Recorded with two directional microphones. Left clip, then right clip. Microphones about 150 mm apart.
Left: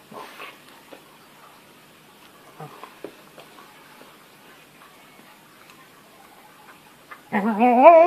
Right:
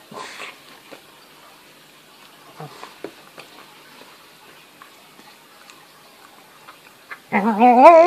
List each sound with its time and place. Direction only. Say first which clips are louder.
7.1 s speech: right 5 dB; 15° right (ahead or behind)